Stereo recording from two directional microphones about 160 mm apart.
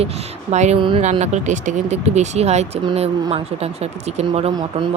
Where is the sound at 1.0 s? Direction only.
45° right (ahead or behind).